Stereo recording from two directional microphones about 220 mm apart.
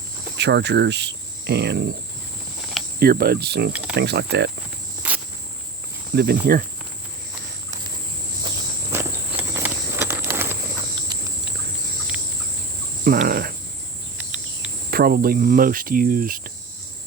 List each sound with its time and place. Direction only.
0.3 s cricket: 50° right (ahead or behind)
3.0 s cricket: 45° right (ahead or behind)
3.7 s speech: 5° right (ahead or behind)
3.9 s cricket: 50° right (ahead or behind)
6.1 s cricket: 45° right (ahead or behind)
8.9 s a sound: 10° right (ahead or behind)
13.1 s cricket: 40° right (ahead or behind)
14.2 s cricket: 5° right (ahead or behind)
14.8 s cricket: 45° right (ahead or behind)